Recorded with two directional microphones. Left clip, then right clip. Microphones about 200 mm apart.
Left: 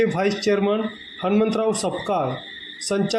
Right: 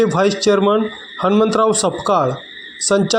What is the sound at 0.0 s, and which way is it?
A man's voice, 40° right (ahead or behind).